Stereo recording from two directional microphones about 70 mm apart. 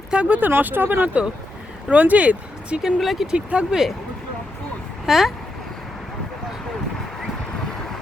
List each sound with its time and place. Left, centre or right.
0.1 s speech: centre
3.0 s speech: centre
3.3 s speech: centre
5.0 s speech: centre